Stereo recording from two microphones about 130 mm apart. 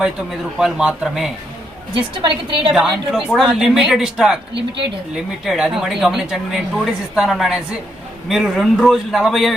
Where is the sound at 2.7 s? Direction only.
5° right (ahead or behind).